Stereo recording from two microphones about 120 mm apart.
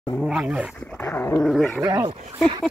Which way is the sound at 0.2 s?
Centre (ahead or behind).